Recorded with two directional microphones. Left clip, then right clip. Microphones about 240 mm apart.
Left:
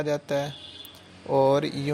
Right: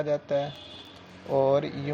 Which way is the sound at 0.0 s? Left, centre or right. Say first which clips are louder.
Even; left.